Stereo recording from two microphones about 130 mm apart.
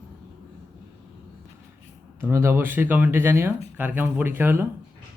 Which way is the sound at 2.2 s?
15° right (ahead or behind).